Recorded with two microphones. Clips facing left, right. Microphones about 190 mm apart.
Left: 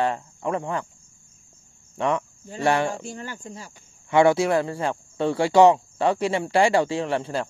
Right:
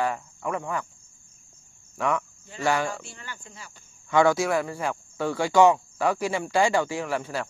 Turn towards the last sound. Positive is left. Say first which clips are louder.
# left 4 dB
turn(degrees=30)  # may be behind; listen again after turning